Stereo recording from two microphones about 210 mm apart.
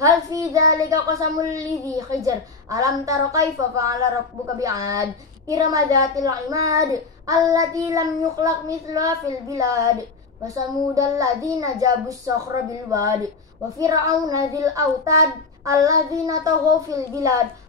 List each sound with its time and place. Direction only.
0.0 s a woman's voice: 15° right (ahead or behind)